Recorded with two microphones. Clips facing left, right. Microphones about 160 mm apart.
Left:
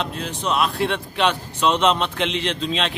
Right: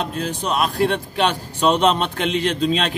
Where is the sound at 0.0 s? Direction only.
40° right (ahead or behind).